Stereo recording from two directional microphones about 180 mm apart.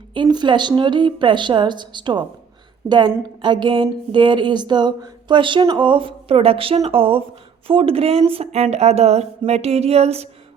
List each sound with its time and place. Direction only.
0.1 s speech: 25° right (ahead or behind)
3.4 s speech: 25° right (ahead or behind)